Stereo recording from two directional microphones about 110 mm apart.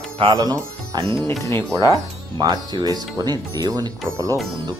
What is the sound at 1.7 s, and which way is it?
Speech, 40° left (ahead or behind).